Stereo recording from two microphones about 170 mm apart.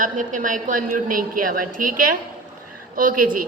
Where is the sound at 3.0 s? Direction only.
50° right (ahead or behind).